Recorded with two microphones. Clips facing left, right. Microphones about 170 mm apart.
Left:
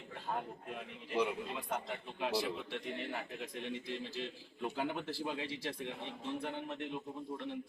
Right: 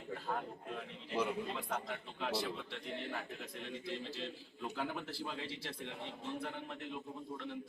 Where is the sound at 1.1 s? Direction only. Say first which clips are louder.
Left 2 dB; centre (ahead or behind).